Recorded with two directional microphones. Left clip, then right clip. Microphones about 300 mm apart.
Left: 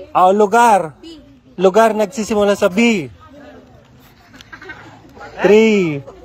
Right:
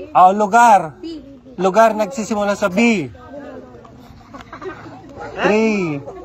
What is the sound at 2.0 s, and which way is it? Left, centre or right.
Speech, left.